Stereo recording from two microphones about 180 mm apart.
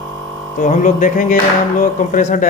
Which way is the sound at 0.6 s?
45° left (ahead or behind).